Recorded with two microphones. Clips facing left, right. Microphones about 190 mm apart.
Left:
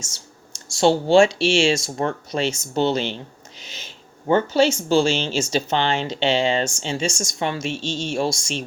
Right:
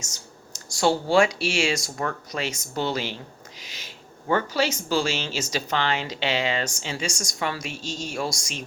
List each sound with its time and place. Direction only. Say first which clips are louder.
0.0 s speech: left 1 dB; 30° left (ahead or behind)